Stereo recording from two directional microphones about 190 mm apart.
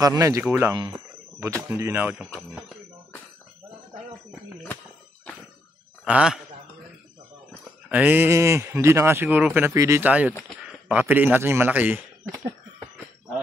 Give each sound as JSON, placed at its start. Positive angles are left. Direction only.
{"t": 0.0, "sound": "speech", "side_deg": -20}
{"t": 0.7, "sound": "cricket", "side_deg": -20}
{"t": 1.7, "sound": "speech", "side_deg": -10}
{"t": 6.0, "sound": "a man's voice", "side_deg": -5}
{"t": 7.9, "sound": "speech", "side_deg": -10}